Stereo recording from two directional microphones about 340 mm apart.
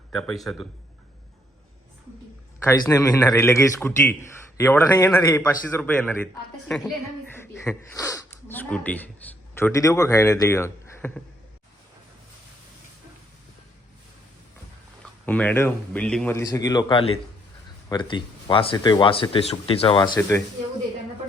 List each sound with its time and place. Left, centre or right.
0.1 s a man's voice: centre
2.6 s a man's voice: centre
15.3 s a man's voice: centre